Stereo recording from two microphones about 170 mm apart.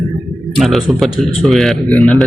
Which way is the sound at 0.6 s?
Centre (ahead or behind).